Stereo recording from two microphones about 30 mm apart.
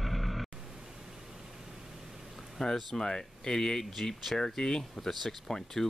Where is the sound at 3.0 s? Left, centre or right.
Left.